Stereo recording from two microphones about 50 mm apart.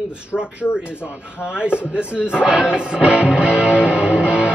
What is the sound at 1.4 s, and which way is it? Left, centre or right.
Speech, right.